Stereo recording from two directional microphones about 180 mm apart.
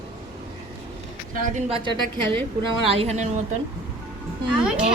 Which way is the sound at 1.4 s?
40° right (ahead or behind).